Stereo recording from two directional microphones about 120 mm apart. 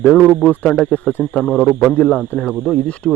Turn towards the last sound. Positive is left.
turn(degrees=10)  # may be behind; listen again after turning